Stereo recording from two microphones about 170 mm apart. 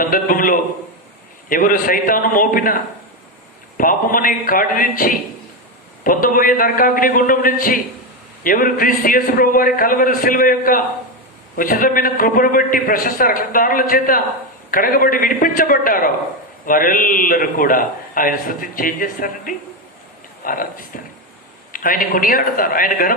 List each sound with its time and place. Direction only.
0.0 s a man's voice: 55° left (ahead or behind)
3.8 s a man's voice: 55° left (ahead or behind)